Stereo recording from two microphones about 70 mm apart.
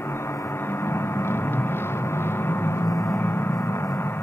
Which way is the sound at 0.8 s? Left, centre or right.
Left.